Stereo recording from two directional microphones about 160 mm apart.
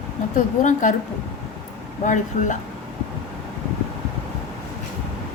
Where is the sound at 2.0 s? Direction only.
50° left (ahead or behind).